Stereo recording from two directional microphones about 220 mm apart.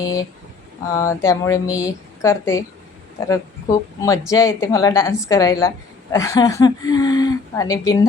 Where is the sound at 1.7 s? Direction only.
5° right (ahead or behind).